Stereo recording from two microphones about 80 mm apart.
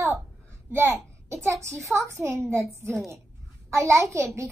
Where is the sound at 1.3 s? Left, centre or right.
Right.